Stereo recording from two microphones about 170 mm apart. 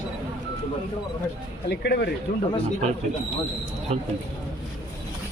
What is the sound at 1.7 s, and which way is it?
Speech, 75° left (ahead or behind).